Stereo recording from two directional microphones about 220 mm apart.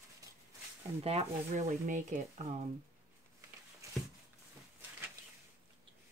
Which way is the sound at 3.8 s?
15° right (ahead or behind).